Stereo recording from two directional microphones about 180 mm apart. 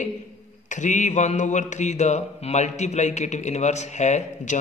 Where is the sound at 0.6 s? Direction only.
45° left (ahead or behind).